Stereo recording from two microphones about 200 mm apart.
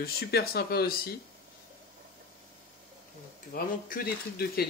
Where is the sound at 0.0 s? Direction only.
50° left (ahead or behind).